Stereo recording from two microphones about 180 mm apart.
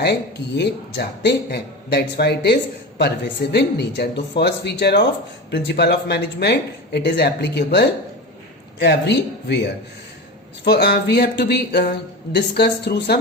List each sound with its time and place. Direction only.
0.0 s speech: 65° left (ahead or behind)
10.6 s speech: 65° left (ahead or behind)